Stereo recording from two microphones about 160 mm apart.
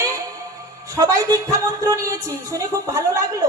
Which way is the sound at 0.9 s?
20° right (ahead or behind).